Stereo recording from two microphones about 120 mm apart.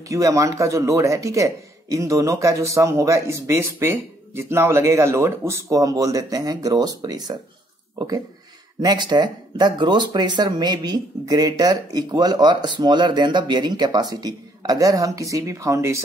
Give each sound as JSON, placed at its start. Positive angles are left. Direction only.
{"t": 0.1, "sound": "a man's voice", "side_deg": -25}
{"t": 8.8, "sound": "speech", "side_deg": -35}